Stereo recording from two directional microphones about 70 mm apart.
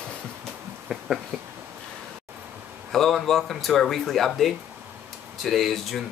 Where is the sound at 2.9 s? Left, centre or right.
Centre.